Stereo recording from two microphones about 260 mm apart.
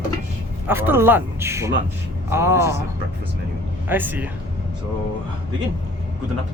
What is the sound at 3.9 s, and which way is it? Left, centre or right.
Speech, centre.